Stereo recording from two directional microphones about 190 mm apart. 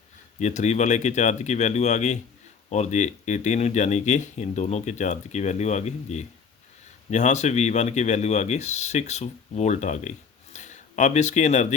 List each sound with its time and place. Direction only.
0.3 s speech: 40° left (ahead or behind)